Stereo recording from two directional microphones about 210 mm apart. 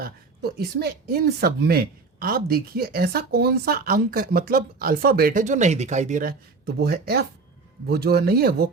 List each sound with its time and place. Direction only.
0.0 s speech: 50° right (ahead or behind)